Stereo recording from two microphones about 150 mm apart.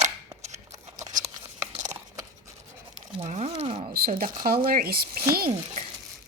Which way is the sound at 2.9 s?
50° right (ahead or behind).